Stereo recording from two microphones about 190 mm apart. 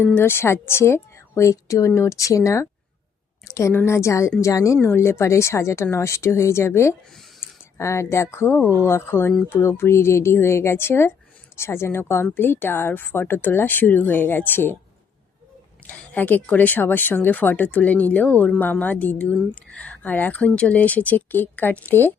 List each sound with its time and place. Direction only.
0.0 s speech: 10° left (ahead or behind)
15.9 s speech: 10° left (ahead or behind)